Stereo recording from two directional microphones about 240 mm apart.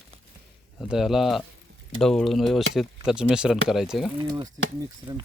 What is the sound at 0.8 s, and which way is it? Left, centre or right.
Speech, centre.